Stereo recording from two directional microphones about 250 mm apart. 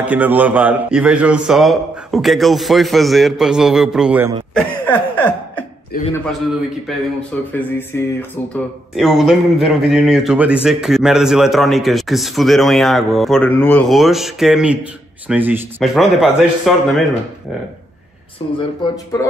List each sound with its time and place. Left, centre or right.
0.0 s speech: centre
4.8 s a sound: centre
5.9 s a man's voice: left
7.2 s speech: centre
18.8 s speech: centre